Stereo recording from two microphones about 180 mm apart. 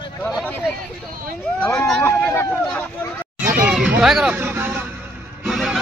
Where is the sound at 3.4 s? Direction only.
50° right (ahead or behind).